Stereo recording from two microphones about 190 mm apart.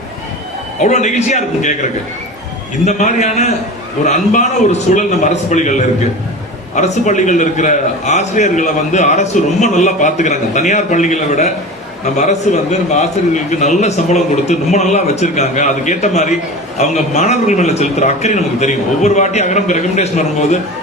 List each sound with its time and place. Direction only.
0.8 s a man's voice: 40° left (ahead or behind)
2.8 s a man's voice: 40° left (ahead or behind)